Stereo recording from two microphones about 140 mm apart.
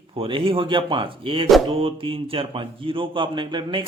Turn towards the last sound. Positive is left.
turn(degrees=-35)  # may be behind; listen again after turning